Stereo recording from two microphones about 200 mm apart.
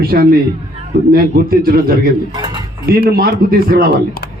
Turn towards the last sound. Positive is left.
turn(degrees=-50)  # may be behind; listen again after turning